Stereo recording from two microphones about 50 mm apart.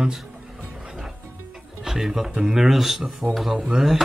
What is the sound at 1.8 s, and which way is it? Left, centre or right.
Speech, centre.